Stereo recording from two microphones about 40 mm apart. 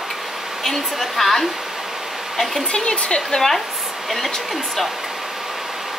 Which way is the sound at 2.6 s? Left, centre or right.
Left.